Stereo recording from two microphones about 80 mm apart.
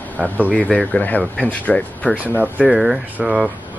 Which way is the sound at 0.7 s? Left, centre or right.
Centre.